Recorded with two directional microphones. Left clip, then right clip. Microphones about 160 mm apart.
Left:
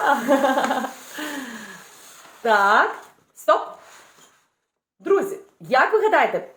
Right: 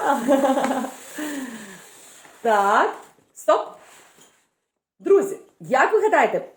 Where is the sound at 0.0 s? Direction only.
20° right (ahead or behind).